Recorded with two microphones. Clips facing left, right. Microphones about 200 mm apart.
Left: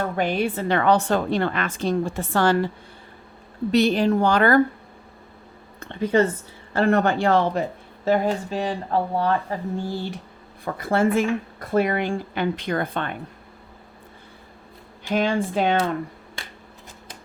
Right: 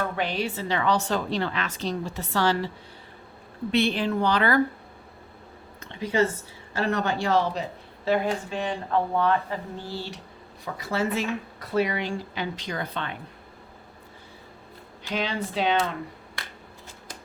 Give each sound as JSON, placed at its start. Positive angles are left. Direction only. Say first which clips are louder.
{"t": 0.2, "sound": "speech", "louder": "left 5 dB", "side_deg": 50}
{"t": 3.7, "sound": "speech", "louder": "left 5 dB", "side_deg": 40}
{"t": 5.8, "sound": "a woman's voice", "louder": "left 4 dB", "side_deg": 55}
{"t": 15.0, "sound": "speech", "louder": "left 7 dB", "side_deg": 50}